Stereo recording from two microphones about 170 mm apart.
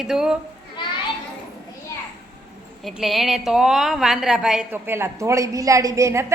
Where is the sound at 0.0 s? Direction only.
5° right (ahead or behind).